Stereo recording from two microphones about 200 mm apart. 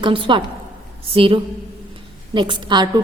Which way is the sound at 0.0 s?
25° right (ahead or behind).